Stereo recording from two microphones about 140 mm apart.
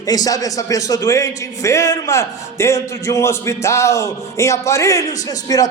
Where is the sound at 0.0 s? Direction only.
25° left (ahead or behind).